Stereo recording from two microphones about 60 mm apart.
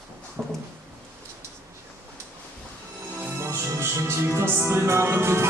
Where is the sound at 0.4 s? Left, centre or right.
Centre.